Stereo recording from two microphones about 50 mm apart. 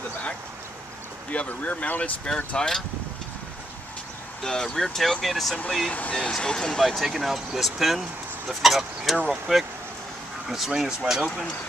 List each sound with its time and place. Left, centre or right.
1.3 s speech: left
2.2 s speech: centre
4.4 s speech: centre
5.9 s speech: left
6.3 s speech: centre
6.8 s speech: centre